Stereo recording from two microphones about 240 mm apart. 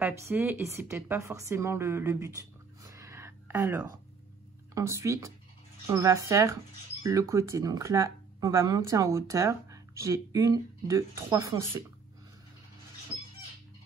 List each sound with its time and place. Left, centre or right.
0.0 s speech: centre
2.9 s a sound: centre
4.7 s speech: centre